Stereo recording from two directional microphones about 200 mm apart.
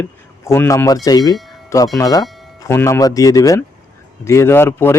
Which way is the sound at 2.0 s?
20° left (ahead or behind).